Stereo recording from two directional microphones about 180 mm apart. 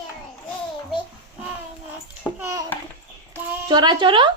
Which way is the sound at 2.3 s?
15° right (ahead or behind).